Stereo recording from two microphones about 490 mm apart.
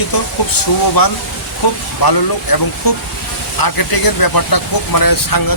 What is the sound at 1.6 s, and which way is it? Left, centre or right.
Speech, left.